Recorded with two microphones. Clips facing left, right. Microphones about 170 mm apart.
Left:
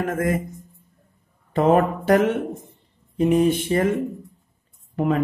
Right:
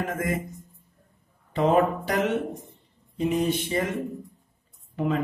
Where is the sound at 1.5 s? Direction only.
55° left (ahead or behind).